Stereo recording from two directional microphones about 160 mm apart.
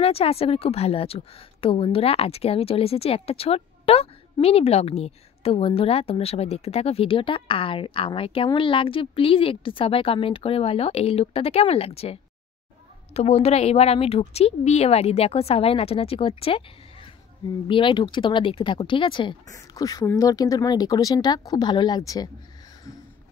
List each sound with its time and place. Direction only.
0.0 s a woman's voice: 40° left (ahead or behind)